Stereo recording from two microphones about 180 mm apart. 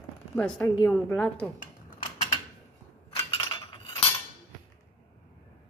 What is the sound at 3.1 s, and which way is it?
Chink, 30° left (ahead or behind).